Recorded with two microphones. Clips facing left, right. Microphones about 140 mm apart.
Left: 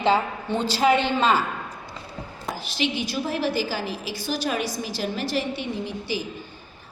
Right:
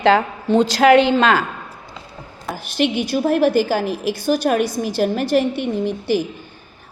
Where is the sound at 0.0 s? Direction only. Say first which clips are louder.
Right 6 dB; 90° right.